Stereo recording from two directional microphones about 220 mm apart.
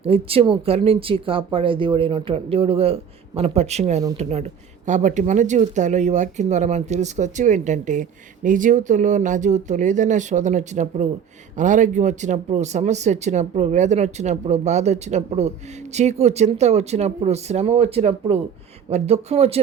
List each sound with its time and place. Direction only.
0.0 s speech: 25° right (ahead or behind)